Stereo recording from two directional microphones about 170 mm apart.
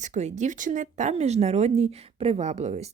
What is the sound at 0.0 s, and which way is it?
Speech, 45° right (ahead or behind).